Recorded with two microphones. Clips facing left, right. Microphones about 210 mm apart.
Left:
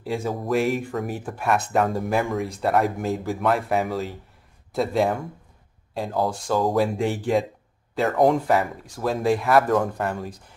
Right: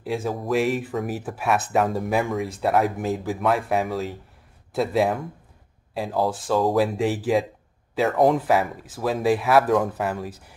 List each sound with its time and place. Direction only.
0.0 s speech: centre (ahead or behind)